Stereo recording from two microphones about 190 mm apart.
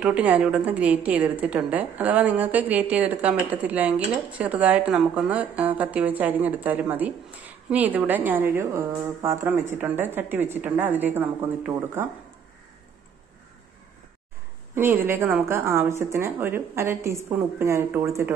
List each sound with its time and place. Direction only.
0.0 s a woman's voice: 5° right (ahead or behind)
14.8 s a woman's voice: 10° right (ahead or behind)